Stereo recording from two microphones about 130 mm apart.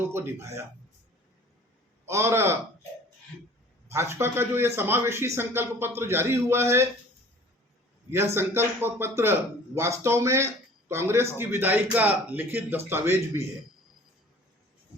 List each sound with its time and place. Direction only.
0.0 s a man's voice: 20° right (ahead or behind)
2.0 s a man's voice: 20° right (ahead or behind)
3.8 s a man's voice: 20° right (ahead or behind)
8.1 s a man's voice: 20° right (ahead or behind)